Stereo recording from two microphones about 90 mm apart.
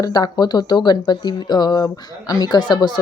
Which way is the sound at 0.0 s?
50° left (ahead or behind).